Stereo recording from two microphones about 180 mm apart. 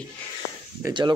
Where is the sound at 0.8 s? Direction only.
25° right (ahead or behind).